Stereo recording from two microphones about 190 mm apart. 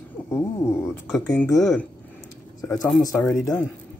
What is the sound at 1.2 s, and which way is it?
Speech, 15° left (ahead or behind).